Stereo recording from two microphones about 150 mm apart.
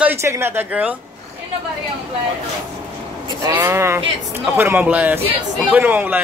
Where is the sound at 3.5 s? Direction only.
15° right (ahead or behind).